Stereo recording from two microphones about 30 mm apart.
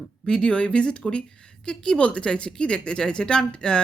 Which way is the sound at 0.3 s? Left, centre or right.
Left.